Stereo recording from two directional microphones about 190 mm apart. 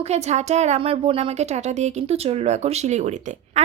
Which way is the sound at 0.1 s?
35° right (ahead or behind).